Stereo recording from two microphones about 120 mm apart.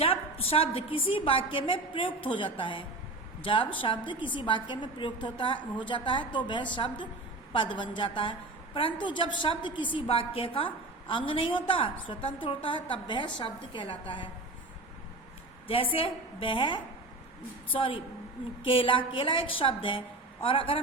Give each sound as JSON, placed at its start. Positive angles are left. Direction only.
{"t": 0.0, "sound": "a woman's voice", "side_deg": 55}
{"t": 15.6, "sound": "a woman's voice", "side_deg": 50}